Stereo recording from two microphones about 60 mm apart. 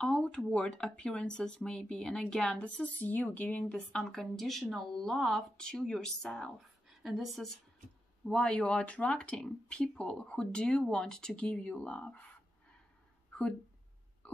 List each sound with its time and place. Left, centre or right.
0.0 s speech: centre
2.8 s speech: left
4.0 s speech: centre
6.9 s a woman's voice: centre
8.3 s speech: centre
13.3 s a sound: centre